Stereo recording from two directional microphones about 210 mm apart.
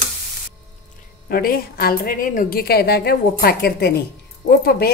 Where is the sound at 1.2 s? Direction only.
45° left (ahead or behind).